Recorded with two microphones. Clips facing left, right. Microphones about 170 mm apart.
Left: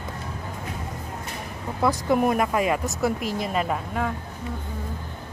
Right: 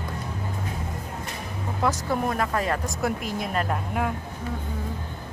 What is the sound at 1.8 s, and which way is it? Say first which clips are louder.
Speech: left 4 dB; 15° left (ahead or behind).